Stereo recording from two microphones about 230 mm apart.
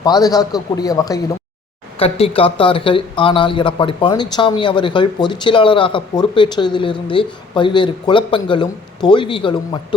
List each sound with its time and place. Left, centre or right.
0.0 s a man's voice: centre
2.0 s speech: left